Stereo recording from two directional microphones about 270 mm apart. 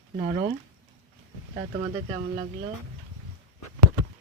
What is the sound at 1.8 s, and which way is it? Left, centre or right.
Speech, centre.